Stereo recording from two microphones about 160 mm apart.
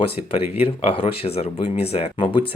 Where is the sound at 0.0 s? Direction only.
35° left (ahead or behind).